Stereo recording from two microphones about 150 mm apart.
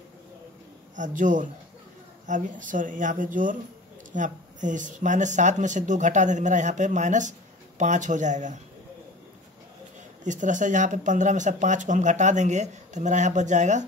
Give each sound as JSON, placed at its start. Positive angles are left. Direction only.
{"t": 0.9, "sound": "speech", "side_deg": -60}
{"t": 10.2, "sound": "speech", "side_deg": -55}